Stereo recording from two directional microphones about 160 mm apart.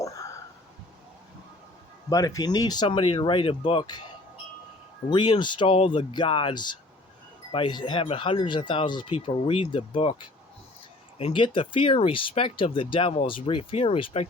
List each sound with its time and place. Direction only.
0.0 s a sound: 20° left (ahead or behind)
2.0 s speech: 20° left (ahead or behind)
5.1 s speech: 30° left (ahead or behind)
11.2 s speech: 35° left (ahead or behind)